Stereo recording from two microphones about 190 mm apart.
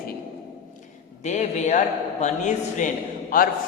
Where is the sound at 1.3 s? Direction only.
40° left (ahead or behind).